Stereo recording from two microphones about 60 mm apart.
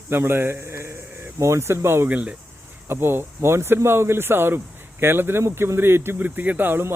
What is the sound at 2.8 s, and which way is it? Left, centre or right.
Speech, right.